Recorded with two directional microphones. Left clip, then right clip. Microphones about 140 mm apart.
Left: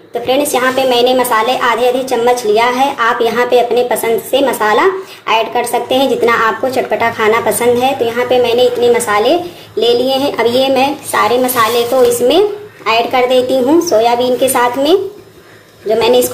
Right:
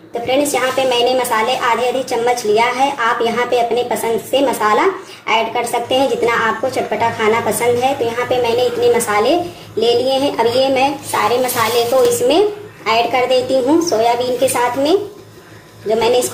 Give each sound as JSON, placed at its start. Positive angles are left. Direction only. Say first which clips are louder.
{"t": 0.3, "sound": "a woman's voice", "louder": "left 3 dB", "side_deg": 25}